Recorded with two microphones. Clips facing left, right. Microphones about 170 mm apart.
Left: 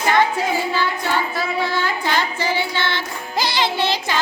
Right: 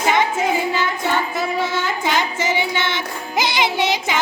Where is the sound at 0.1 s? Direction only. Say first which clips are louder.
Left 1 dB; 20° right (ahead or behind).